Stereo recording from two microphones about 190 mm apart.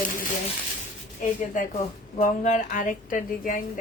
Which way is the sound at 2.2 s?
40° left (ahead or behind).